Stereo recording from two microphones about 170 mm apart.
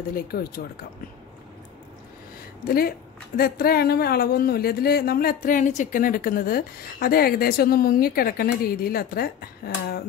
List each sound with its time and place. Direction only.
0.1 s a woman's voice: 60° left (ahead or behind)
3.3 s a woman's voice: 65° left (ahead or behind)